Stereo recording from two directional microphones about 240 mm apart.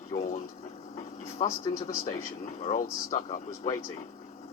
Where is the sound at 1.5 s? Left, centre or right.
Left.